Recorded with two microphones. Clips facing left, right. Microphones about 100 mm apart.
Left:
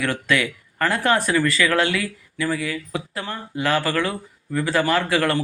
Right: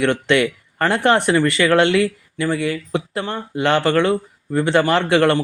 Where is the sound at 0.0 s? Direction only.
25° right (ahead or behind).